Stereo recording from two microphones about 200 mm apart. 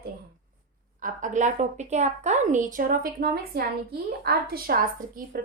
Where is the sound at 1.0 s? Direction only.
40° right (ahead or behind).